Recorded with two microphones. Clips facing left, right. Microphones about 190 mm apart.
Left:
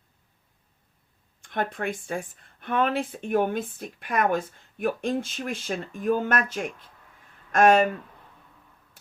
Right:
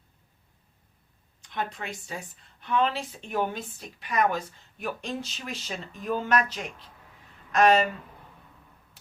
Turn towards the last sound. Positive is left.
turn(degrees=50)  # may be behind; listen again after turning